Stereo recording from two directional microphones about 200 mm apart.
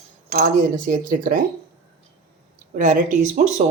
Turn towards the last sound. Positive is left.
turn(degrees=-40)  # may be behind; listen again after turning